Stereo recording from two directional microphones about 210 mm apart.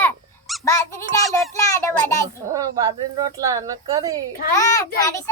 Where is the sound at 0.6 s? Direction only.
15° left (ahead or behind).